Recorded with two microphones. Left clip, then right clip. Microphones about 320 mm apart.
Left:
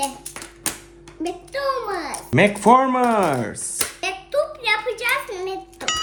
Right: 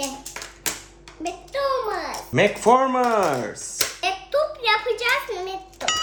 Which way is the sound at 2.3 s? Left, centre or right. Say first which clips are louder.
Left 3 dB; left.